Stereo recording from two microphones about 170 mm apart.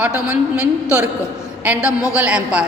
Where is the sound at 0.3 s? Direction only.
5° right (ahead or behind).